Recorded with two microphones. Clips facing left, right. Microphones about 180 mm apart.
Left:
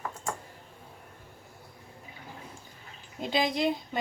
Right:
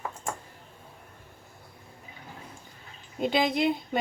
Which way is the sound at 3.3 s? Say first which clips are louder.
Right 1 dB; 60° right (ahead or behind).